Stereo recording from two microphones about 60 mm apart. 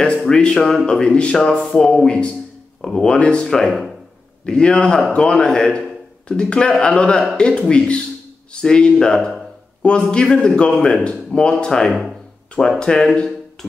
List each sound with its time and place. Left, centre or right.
0.2 s a man's voice: centre
11.9 s a sound: centre
12.6 s speech: centre